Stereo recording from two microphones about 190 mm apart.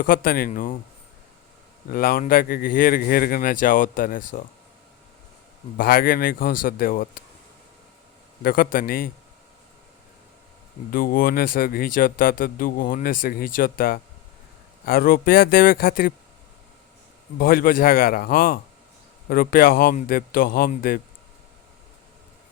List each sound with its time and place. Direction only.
0.0 s speech: 50° left (ahead or behind)
1.9 s speech: 50° left (ahead or behind)
5.7 s speech: 50° left (ahead or behind)
8.4 s speech: 50° left (ahead or behind)
10.9 s speech: 50° left (ahead or behind)
17.3 s speech: 50° left (ahead or behind)